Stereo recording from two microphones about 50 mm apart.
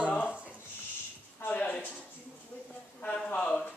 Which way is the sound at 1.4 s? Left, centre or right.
Left.